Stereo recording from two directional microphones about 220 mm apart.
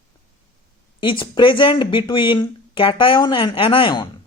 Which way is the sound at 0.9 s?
20° left (ahead or behind).